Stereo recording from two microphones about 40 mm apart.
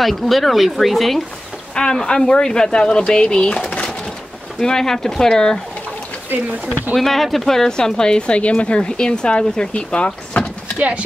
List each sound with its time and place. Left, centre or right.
0.0 s speech: centre
1.8 s speech: left
4.6 s speech: centre
6.3 s speech: right
7.0 s speech: centre; by 10.4 s left